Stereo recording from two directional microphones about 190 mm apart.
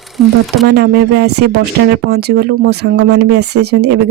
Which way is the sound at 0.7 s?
60° right (ahead or behind).